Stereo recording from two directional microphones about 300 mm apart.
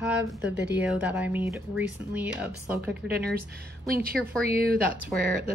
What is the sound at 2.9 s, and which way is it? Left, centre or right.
A woman's voice, right.